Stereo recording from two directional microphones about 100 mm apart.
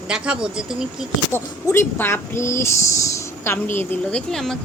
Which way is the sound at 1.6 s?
25° left (ahead or behind).